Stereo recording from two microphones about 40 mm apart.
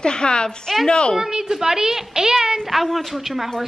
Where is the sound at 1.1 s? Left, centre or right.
Centre.